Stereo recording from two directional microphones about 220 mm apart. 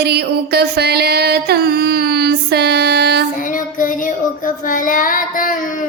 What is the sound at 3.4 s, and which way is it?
Child singing, 35° left (ahead or behind).